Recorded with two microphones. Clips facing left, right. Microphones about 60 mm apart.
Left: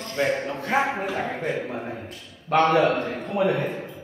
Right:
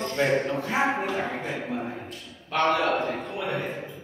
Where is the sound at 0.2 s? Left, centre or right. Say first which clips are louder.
Even; centre.